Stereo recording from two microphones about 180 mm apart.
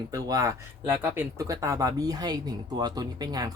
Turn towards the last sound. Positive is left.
turn(degrees=-20)  # may be behind; listen again after turning